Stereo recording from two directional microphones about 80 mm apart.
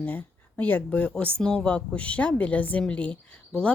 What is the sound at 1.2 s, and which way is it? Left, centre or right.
Speech, centre.